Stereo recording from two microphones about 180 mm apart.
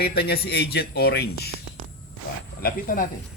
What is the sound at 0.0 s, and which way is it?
Speech, 60° left (ahead or behind).